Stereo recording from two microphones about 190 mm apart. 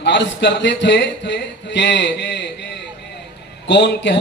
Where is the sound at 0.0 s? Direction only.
65° left (ahead or behind).